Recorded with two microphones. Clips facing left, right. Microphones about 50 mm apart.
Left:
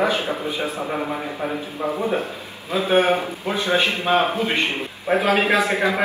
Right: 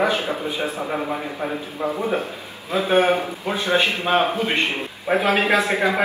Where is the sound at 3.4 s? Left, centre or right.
Centre.